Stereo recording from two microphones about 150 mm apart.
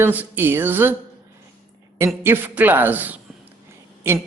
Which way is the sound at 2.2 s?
15° right (ahead or behind).